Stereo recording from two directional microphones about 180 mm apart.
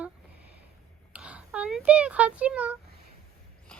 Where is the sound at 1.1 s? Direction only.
5° right (ahead or behind).